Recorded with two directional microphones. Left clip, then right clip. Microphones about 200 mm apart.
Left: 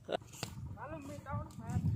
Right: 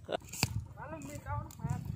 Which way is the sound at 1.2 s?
10° left (ahead or behind).